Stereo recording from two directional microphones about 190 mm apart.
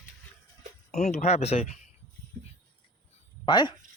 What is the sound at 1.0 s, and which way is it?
Speech, 35° left (ahead or behind).